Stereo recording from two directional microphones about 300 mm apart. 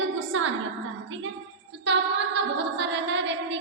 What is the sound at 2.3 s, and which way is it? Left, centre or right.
A woman's voice, right.